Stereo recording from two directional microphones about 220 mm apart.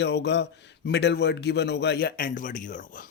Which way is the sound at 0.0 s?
50° left (ahead or behind).